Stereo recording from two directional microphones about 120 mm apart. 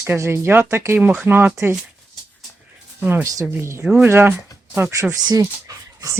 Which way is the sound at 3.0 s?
15° right (ahead or behind).